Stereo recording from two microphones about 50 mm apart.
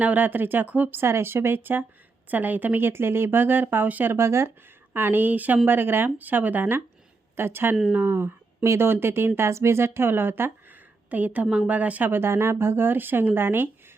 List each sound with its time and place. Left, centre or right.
0.0 s speech: right
1.0 s speech: right
4.1 s speech: right
4.9 s speech: right
5.6 s speech: right
8.9 s speech: right
11.1 s speech: right
12.1 s speech: right